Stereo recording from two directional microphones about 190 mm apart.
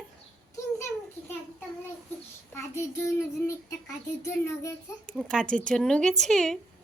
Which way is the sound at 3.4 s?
15° left (ahead or behind).